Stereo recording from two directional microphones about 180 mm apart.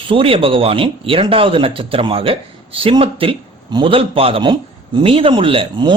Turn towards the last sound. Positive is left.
turn(degrees=-30)  # may be behind; listen again after turning